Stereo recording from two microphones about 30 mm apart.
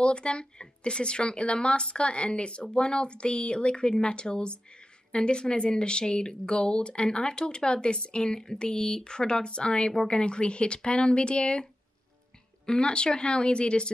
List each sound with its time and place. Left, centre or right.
0.0 s speech: left
12.6 s speech: left